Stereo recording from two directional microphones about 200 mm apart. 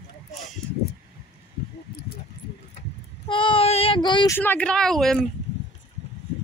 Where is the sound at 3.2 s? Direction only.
25° left (ahead or behind).